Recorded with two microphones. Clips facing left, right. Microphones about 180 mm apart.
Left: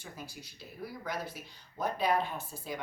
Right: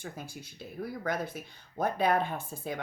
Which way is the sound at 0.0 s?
50° right (ahead or behind).